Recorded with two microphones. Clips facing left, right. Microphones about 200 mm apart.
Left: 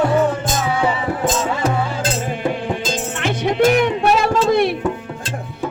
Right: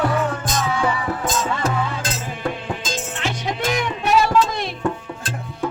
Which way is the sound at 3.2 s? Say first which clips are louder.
Left 10 dB; 55° left (ahead or behind).